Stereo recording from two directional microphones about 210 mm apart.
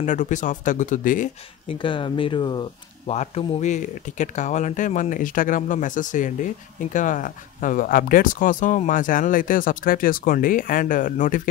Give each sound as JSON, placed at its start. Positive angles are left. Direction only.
{"t": 0.0, "sound": "speech", "side_deg": 35}
{"t": 1.7, "sound": "speech", "side_deg": 25}